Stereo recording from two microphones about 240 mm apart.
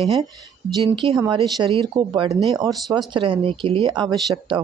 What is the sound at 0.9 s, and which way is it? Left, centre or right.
Speech, centre.